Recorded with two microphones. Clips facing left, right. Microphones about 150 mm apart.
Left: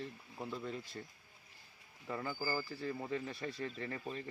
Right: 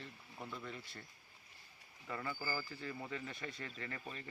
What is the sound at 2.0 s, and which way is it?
Speech, 20° left (ahead or behind).